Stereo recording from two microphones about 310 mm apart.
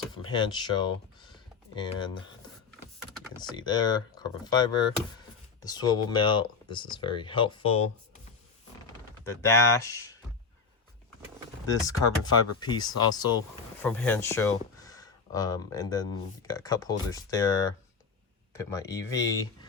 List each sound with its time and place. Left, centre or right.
0.1 s typing: centre
3.5 s speech: centre
9.4 s speech: centre
11.7 s speech: centre